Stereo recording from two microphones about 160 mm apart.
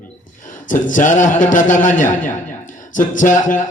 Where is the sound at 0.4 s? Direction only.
55° left (ahead or behind).